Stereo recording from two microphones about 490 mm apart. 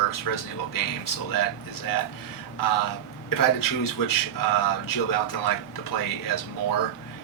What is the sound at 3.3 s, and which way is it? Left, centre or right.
Speech, left.